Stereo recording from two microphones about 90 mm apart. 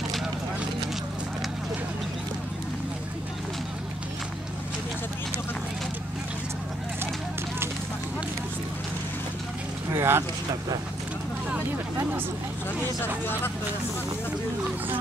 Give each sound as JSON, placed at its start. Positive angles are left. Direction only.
{"t": 9.9, "sound": "speech", "side_deg": -30}